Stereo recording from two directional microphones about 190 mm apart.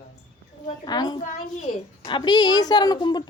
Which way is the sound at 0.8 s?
20° left (ahead or behind).